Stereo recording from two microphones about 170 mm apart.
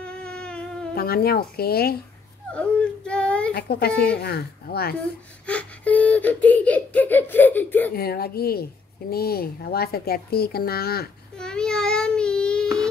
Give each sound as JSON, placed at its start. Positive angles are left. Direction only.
{"t": 0.0, "sound": "a sound", "side_deg": 5}
{"t": 0.9, "sound": "a woman's voice", "side_deg": 65}
{"t": 2.5, "sound": "whimper", "side_deg": 5}
{"t": 3.5, "sound": "a woman's voice", "side_deg": 65}
{"t": 5.5, "sound": "speech", "side_deg": 10}
{"t": 7.9, "sound": "a woman's voice", "side_deg": 65}
{"t": 11.3, "sound": "child singing", "side_deg": 5}